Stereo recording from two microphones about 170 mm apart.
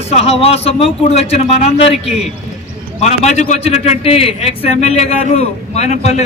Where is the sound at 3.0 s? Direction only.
40° left (ahead or behind).